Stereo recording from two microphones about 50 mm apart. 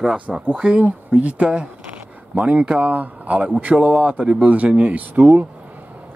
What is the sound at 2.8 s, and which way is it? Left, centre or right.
Speech, right.